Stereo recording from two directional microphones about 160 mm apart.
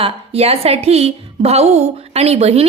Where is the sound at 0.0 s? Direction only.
40° right (ahead or behind).